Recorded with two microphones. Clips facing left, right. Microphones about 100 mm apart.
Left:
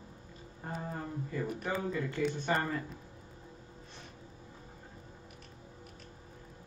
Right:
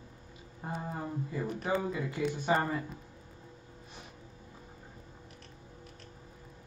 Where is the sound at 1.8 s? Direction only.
10° right (ahead or behind).